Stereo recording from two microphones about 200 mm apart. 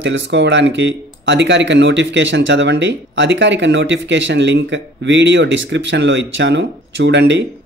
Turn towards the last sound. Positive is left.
turn(degrees=-65)  # may be behind; listen again after turning